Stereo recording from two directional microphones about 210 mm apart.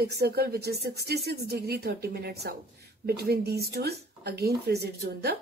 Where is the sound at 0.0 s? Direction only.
50° right (ahead or behind).